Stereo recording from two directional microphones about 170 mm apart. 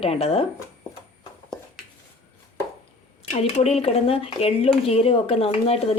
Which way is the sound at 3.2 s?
40° left (ahead or behind).